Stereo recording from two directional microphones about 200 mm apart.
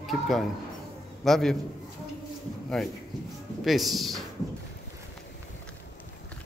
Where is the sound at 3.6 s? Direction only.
Centre (ahead or behind).